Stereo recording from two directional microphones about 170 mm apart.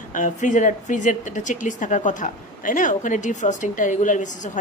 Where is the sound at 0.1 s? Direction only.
50° left (ahead or behind).